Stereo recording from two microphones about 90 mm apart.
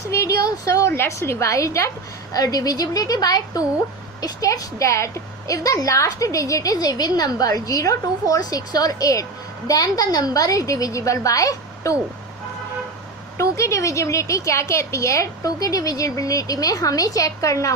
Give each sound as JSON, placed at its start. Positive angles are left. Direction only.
{"t": 0.1, "sound": "a woman's voice", "side_deg": 35}
{"t": 13.3, "sound": "a woman's voice", "side_deg": 35}